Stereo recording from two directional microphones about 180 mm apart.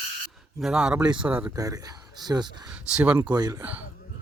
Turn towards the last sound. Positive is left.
turn(degrees=-15)  # may be behind; listen again after turning